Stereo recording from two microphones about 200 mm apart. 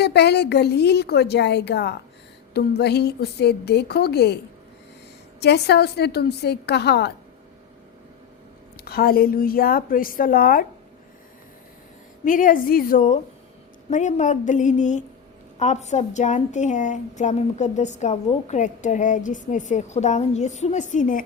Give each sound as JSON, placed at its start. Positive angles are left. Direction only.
{"t": 0.0, "sound": "a woman's voice", "side_deg": 55}
{"t": 5.4, "sound": "a woman's voice", "side_deg": 55}
{"t": 8.8, "sound": "a woman's voice", "side_deg": 50}
{"t": 12.2, "sound": "a woman's voice", "side_deg": 40}